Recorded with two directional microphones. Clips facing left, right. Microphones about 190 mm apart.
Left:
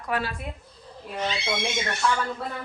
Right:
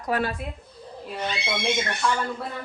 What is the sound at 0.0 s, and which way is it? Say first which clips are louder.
Speech: right 3 dB; 40° right (ahead or behind).